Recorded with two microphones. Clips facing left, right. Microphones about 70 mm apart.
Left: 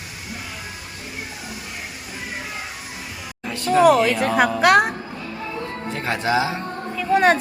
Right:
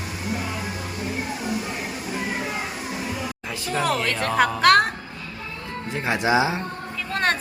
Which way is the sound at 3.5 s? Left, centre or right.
Centre.